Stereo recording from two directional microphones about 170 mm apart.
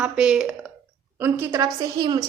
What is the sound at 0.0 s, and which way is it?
A woman's voice, 5° right (ahead or behind).